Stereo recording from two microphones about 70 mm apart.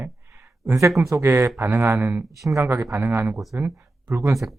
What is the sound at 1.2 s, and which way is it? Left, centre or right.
Speech, right.